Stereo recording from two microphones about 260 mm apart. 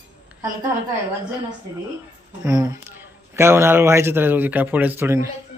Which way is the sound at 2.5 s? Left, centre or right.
Centre.